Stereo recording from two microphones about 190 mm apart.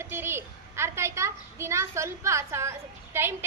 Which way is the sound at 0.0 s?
10° right (ahead or behind).